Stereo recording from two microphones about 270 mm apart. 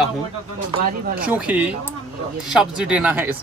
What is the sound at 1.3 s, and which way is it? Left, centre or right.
Speech, centre.